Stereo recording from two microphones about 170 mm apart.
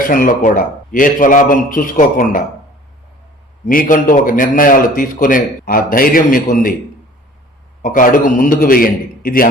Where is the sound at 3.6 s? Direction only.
55° left (ahead or behind).